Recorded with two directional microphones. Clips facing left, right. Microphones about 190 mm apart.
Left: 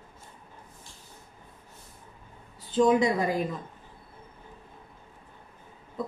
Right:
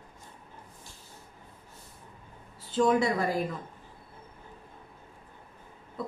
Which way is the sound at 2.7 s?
15° left (ahead or behind).